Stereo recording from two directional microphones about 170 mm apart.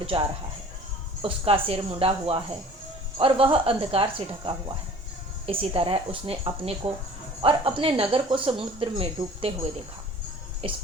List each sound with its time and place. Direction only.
0.1 s speech: 30° right (ahead or behind)
10.6 s speech: 35° right (ahead or behind)